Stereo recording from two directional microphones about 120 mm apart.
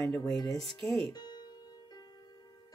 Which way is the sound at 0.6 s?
Centre (ahead or behind).